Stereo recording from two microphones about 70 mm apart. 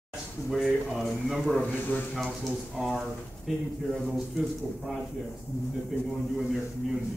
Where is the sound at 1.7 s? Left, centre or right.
Left.